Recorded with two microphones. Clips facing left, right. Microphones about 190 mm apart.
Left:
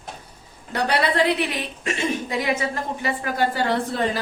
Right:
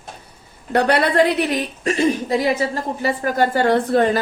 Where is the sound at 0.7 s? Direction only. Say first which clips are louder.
Right 6 dB; 50° right (ahead or behind).